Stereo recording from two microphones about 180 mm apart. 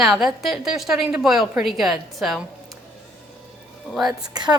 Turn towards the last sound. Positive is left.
turn(degrees=-25)  # may be behind; listen again after turning